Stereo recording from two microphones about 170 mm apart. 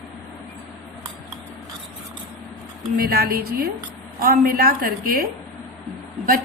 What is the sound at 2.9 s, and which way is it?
A woman's voice, 60° right (ahead or behind).